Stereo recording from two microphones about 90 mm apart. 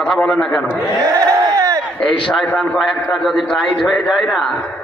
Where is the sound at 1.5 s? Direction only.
35° right (ahead or behind).